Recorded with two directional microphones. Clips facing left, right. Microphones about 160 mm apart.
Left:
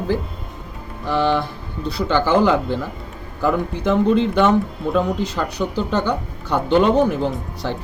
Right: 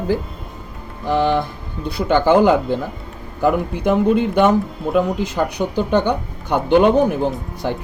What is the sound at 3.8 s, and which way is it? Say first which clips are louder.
Speech: even; 55° right (ahead or behind).